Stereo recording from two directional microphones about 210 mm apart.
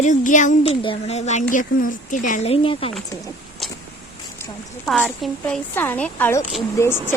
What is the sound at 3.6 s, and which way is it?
Vehicle, centre (ahead or behind).